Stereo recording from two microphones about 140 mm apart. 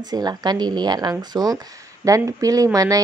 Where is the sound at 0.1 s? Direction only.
30° right (ahead or behind).